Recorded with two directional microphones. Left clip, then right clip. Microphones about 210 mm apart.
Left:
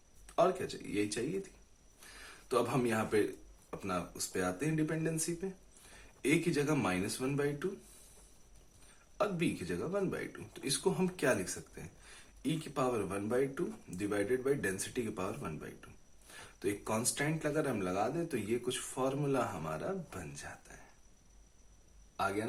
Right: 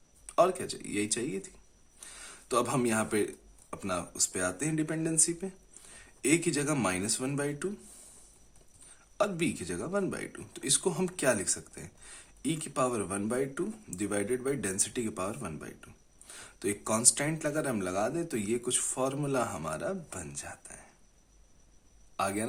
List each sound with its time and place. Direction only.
0.3 s speech: 35° right (ahead or behind)
2.5 s speech: 35° right (ahead or behind)
9.1 s speech: 35° right (ahead or behind)
20.7 s a sound: 40° right (ahead or behind)